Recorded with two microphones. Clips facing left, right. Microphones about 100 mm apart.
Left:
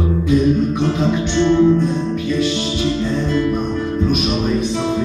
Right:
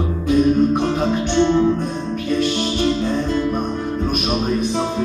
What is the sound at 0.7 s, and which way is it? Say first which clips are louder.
Music: left 1 dB; 50° right (ahead or behind).